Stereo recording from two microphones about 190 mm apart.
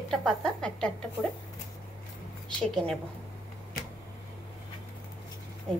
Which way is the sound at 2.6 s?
5° left (ahead or behind).